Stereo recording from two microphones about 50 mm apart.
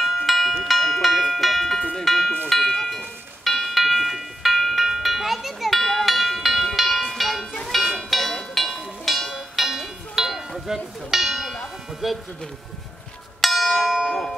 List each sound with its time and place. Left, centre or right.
0.3 s music: centre
1.8 s music: left
2.0 s music: centre
12.0 s speech: centre
13.4 s church bell: centre